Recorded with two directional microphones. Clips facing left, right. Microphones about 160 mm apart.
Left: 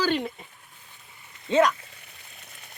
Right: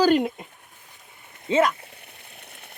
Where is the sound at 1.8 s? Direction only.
60° right (ahead or behind).